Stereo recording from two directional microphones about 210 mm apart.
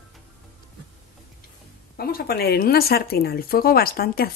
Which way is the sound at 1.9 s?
45° left (ahead or behind).